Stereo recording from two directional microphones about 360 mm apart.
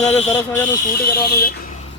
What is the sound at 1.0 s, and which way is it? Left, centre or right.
Speech, left.